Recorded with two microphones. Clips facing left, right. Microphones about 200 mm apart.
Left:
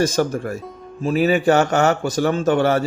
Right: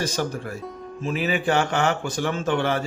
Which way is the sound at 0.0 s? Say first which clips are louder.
Left 7 dB; 45° left (ahead or behind).